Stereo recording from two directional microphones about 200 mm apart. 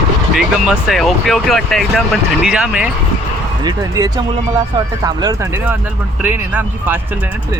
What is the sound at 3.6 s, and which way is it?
Speech, 20° right (ahead or behind).